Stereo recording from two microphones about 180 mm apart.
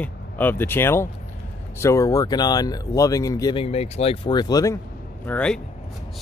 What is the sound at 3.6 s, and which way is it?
Speech, 35° left (ahead or behind).